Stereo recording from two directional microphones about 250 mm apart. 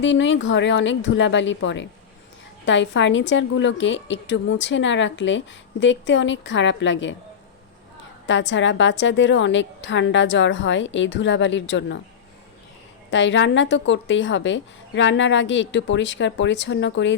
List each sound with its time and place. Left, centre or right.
0.0 s a woman's voice: left
8.3 s a woman's voice: left
13.1 s a woman's voice: left